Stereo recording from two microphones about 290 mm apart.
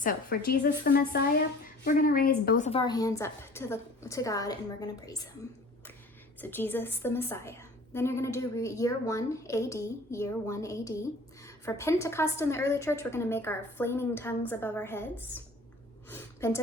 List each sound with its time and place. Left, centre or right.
0.0 s a woman's voice: left; by 5.1 s centre
6.4 s a woman's voice: centre
16.0 s a sound: centre